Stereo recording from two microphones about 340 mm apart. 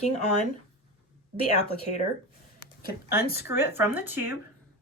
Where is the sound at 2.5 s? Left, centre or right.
Left.